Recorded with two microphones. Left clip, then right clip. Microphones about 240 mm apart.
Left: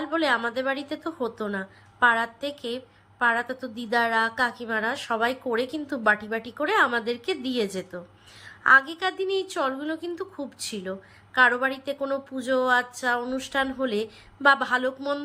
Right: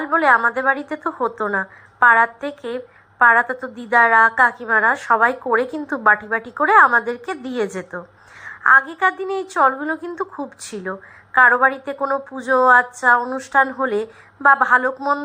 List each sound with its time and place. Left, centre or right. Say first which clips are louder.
0.0 s a woman's voice: right 10 dB; right
3.4 s a woman's voice: right 8 dB; right
3.8 s a woman's voice: right 10 dB; right